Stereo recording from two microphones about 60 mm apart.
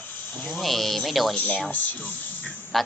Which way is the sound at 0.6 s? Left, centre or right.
Centre.